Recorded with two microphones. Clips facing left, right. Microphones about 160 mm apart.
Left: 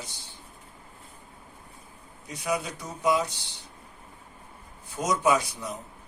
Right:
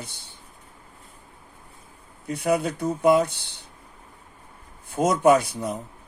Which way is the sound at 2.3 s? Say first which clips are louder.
Right 7 dB; 55° right (ahead or behind).